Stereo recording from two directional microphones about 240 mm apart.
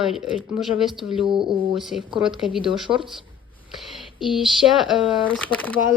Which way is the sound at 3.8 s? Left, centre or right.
Centre.